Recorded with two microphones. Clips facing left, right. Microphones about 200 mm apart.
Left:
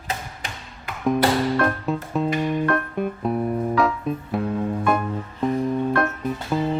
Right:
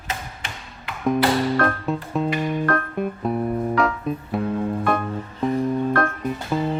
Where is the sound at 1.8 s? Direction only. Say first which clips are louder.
Even; centre (ahead or behind).